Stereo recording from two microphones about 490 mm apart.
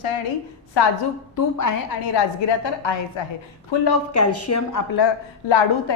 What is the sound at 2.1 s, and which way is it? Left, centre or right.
A woman's voice, left.